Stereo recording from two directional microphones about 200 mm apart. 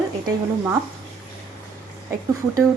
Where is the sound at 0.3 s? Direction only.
15° right (ahead or behind).